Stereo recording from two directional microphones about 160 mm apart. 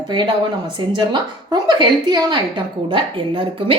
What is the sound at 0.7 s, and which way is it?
A woman's voice, 30° right (ahead or behind).